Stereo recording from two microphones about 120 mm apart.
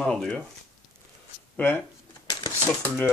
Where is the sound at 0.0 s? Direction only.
5° left (ahead or behind).